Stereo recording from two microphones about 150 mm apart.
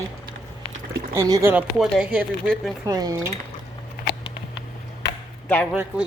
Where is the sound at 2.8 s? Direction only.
25° right (ahead or behind).